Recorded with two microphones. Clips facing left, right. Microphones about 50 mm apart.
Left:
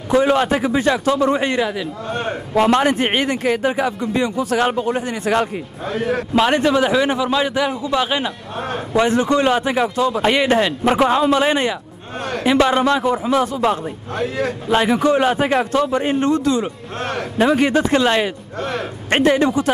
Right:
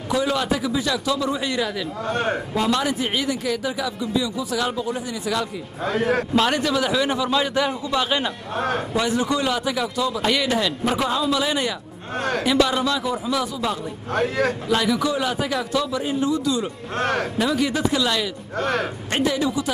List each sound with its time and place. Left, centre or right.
0.1 s a man's voice: left
6.3 s a man's voice: left
8.9 s a man's voice: left
14.1 s a man's voice: right
14.7 s a man's voice: left
17.0 s a man's voice: right
17.4 s a man's voice: left
18.6 s a man's voice: right
19.0 s a man's voice: left